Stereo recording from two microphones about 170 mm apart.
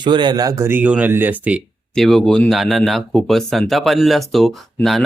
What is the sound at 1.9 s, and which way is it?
Speech, centre (ahead or behind).